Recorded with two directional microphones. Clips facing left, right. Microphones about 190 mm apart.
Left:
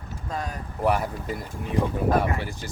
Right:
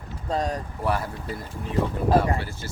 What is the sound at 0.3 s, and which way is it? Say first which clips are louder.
Speech: right 6 dB; 35° right (ahead or behind).